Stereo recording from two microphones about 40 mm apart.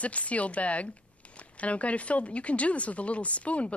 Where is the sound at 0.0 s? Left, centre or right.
Left.